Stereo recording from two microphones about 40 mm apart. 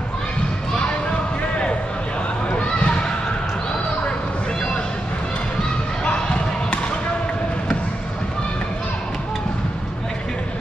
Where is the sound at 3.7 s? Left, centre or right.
Left.